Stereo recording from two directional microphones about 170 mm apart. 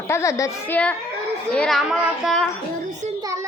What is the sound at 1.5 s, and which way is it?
Child singing, 5° left (ahead or behind).